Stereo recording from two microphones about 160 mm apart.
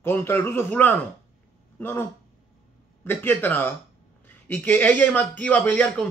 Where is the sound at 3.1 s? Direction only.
10° left (ahead or behind).